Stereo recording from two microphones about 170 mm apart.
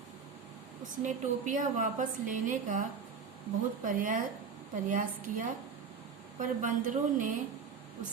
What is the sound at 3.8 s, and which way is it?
A woman's voice, 55° right (ahead or behind).